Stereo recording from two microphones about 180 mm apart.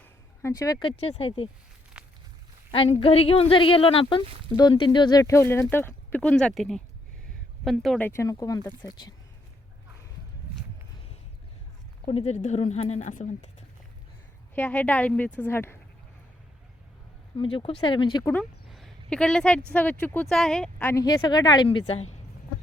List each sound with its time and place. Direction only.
0.0 s speech: 15° left (ahead or behind); by 1.5 s 35° left (ahead or behind)
2.0 s walk: 5° right (ahead or behind)
2.7 s speech: 30° left (ahead or behind)
12.0 s a woman's voice: 35° left (ahead or behind)
14.5 s speech: 10° left (ahead or behind)
17.3 s speech: 30° left (ahead or behind)
18.7 s a sound: 5° left (ahead or behind)
19.7 s speech: 10° left (ahead or behind)
20.9 s speech: 20° left (ahead or behind); by 22.2 s 35° left (ahead or behind)